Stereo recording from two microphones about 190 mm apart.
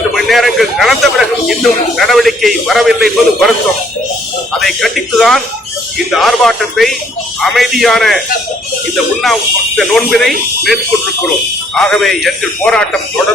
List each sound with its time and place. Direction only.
0.1 s a man's voice: centre (ahead or behind)
4.6 s a man's voice: centre (ahead or behind)
9.2 s a man's voice: centre (ahead or behind)